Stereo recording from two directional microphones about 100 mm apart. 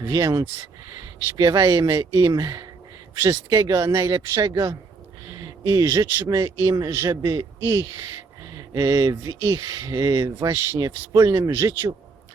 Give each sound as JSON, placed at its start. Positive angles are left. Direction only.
{"t": 0.0, "sound": "speech", "side_deg": -35}
{"t": 5.6, "sound": "a man's voice", "side_deg": -40}